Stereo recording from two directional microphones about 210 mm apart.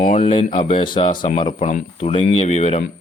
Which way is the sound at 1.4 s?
25° left (ahead or behind).